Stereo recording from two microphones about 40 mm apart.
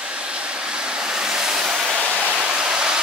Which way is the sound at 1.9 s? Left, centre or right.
Right.